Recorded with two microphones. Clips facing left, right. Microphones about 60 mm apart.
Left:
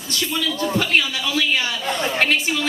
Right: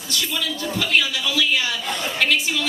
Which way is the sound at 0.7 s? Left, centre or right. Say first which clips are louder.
Right 1 dB; left.